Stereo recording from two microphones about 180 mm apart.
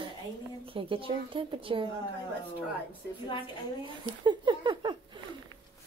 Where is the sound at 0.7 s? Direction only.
30° right (ahead or behind).